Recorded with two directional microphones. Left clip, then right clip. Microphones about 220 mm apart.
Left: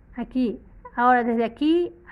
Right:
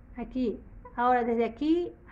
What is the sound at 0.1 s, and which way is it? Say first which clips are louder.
A woman's voice: left 5 dB; 40° left (ahead or behind).